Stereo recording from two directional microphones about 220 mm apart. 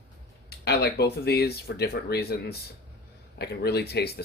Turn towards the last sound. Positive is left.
turn(degrees=45)  # may be behind; listen again after turning